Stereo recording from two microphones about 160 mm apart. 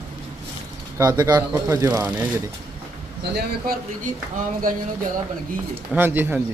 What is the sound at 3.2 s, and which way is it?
Speech, 80° right.